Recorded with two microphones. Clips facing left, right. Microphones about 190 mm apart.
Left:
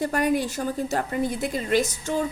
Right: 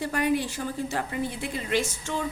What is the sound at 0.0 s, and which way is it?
A woman's voice, 45° left (ahead or behind).